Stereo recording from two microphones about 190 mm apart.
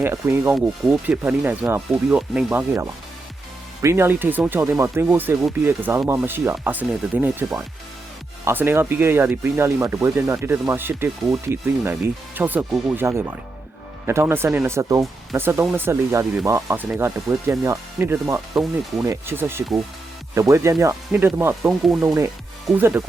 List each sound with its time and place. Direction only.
0.0 s speech: 10° right (ahead or behind)